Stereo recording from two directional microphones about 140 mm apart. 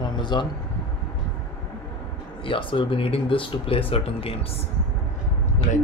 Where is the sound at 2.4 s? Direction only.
35° left (ahead or behind).